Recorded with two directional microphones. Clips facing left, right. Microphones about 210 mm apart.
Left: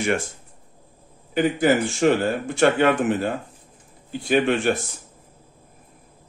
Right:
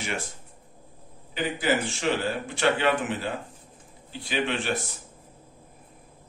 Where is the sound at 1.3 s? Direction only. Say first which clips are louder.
Left 7 dB; 50° left (ahead or behind).